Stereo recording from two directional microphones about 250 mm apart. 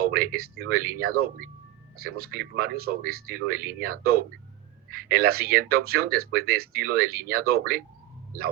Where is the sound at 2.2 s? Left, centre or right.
Right.